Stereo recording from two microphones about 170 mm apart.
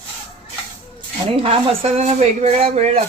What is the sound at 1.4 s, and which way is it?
Speech, 35° right (ahead or behind).